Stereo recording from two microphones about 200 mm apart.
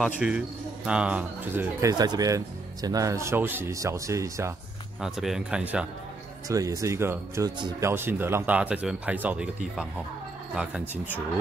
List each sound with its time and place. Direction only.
0.0 s speech: 5° right (ahead or behind)
5.0 s speech: centre (ahead or behind)
6.5 s speech: 15° right (ahead or behind)